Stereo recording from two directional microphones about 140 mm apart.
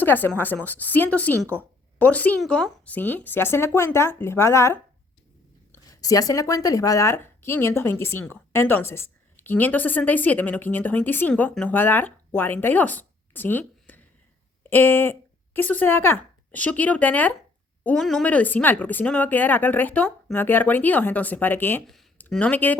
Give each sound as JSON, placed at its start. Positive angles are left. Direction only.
{"t": 0.0, "sound": "speech", "side_deg": 15}